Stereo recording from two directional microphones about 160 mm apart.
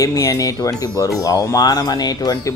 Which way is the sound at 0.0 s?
20° left (ahead or behind).